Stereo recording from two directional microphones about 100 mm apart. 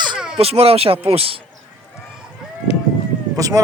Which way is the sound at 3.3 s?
35° right (ahead or behind).